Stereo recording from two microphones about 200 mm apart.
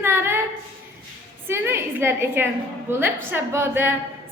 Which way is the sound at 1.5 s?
10° right (ahead or behind).